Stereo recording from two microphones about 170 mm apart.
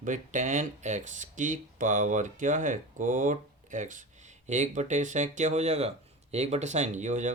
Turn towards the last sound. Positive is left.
turn(degrees=-45)  # may be behind; listen again after turning